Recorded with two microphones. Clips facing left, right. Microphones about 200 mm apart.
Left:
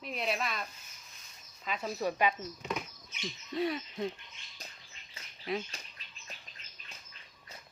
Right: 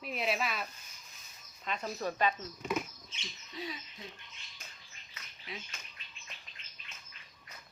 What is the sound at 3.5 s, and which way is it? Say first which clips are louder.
Speech: left 11 dB; 60° left (ahead or behind).